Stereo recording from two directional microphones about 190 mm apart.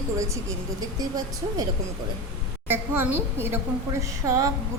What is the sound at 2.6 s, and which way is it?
A woman's voice, 10° right (ahead or behind).